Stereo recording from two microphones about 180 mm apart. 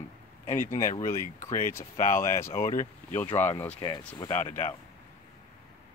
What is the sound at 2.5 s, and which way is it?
Speech, 45° left (ahead or behind).